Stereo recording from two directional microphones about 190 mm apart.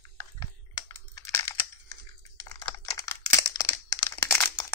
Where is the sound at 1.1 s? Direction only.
15° left (ahead or behind).